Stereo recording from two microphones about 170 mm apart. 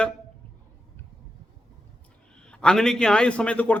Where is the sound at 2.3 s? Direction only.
5° left (ahead or behind).